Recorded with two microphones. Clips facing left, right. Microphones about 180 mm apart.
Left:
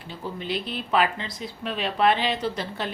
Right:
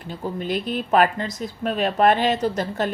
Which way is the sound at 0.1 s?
45° right (ahead or behind).